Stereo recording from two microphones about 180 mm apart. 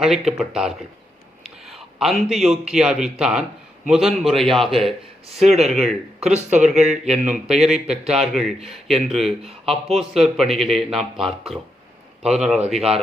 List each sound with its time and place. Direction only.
0.0 s a man's voice: centre (ahead or behind)
5.3 s speech: 35° right (ahead or behind)
8.0 s a man's voice: centre (ahead or behind)
12.7 s speech: 35° right (ahead or behind)